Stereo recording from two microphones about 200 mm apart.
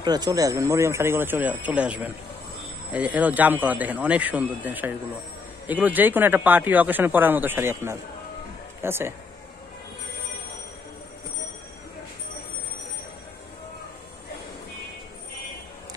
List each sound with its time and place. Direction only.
0.0 s speech: 20° right (ahead or behind)